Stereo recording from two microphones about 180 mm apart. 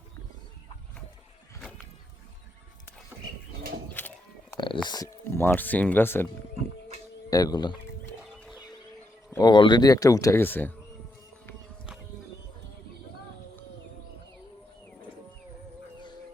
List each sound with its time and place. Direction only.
4.5 s speech: 25° left (ahead or behind)
7.3 s speech: 20° left (ahead or behind)
8.2 s horse: centre (ahead or behind)
9.3 s speech: 25° left (ahead or behind)